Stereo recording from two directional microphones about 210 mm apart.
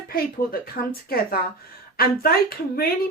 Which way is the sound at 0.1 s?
45° left (ahead or behind).